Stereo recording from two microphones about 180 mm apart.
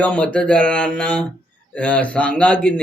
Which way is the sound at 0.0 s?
5° left (ahead or behind).